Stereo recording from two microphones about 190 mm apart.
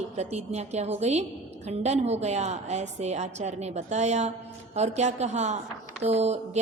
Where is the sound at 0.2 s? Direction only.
35° right (ahead or behind).